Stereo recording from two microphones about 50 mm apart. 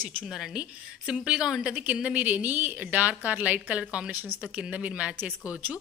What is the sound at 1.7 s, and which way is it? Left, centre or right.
A woman's voice, right.